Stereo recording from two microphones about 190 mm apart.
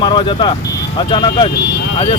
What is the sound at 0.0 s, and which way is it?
Speech, 25° left (ahead or behind).